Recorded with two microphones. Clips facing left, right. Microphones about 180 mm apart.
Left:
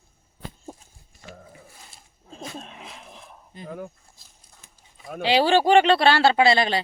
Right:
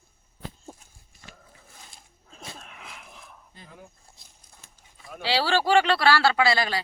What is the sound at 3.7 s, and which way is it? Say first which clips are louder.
Speech: left 14 dB; 55° left (ahead or behind).